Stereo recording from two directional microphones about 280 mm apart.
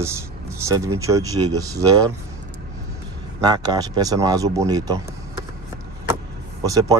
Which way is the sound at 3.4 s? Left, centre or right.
Centre.